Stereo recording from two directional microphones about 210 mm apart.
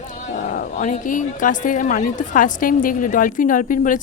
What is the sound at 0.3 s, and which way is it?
A woman's voice, 35° left (ahead or behind).